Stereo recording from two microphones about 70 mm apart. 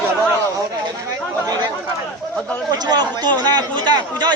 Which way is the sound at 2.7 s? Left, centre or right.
Right.